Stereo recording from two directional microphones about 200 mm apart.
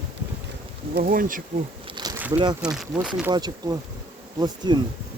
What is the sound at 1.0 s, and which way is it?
Speech, 45° right (ahead or behind).